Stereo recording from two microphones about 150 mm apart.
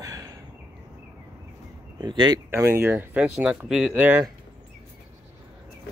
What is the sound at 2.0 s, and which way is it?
Speech, 30° right (ahead or behind).